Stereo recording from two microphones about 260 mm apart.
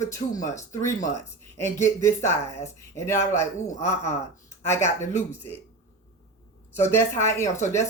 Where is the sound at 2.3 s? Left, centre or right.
Centre.